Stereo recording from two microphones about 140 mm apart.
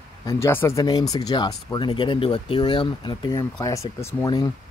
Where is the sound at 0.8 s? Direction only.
30° left (ahead or behind).